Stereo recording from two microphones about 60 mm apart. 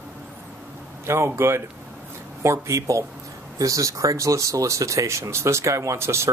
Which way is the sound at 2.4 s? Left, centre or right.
Right.